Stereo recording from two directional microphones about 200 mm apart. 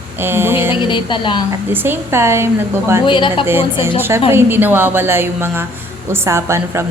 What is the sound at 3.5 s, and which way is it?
A woman's voice, 10° right (ahead or behind).